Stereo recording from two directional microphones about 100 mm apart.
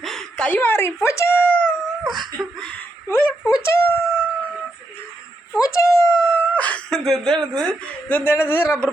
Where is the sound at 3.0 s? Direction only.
20° left (ahead or behind).